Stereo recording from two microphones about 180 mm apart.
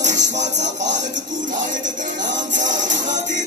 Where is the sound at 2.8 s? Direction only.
45° right (ahead or behind).